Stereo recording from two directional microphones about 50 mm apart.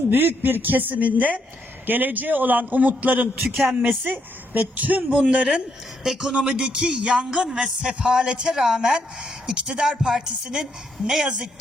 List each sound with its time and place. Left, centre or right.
0.1 s a man's voice: right
3.5 s music: centre
3.8 s a man's voice: right
5.5 s speech: centre
6.1 s speech: centre
6.3 s speech: centre